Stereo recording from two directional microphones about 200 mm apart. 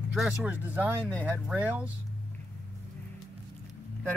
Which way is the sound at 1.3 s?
10° right (ahead or behind).